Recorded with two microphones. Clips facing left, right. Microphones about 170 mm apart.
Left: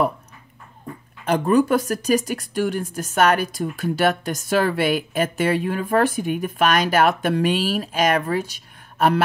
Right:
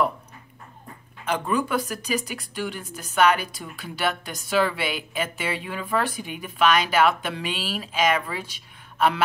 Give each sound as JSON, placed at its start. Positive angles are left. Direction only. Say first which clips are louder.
{"t": 1.2, "sound": "speech", "louder": "left 7 dB", "side_deg": 40}